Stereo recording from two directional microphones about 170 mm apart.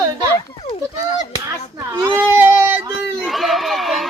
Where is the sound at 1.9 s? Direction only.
15° right (ahead or behind).